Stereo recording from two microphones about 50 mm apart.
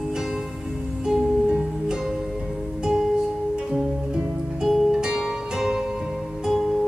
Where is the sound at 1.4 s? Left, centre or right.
Right.